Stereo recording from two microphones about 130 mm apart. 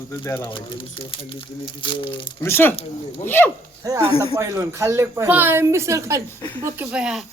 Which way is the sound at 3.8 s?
25° right (ahead or behind).